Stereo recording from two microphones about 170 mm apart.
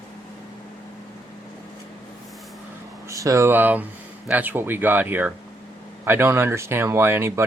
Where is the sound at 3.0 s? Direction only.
20° right (ahead or behind).